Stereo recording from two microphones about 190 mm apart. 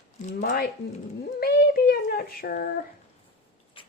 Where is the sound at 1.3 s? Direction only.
55° left (ahead or behind).